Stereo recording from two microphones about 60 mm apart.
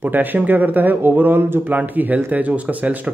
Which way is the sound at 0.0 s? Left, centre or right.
Right.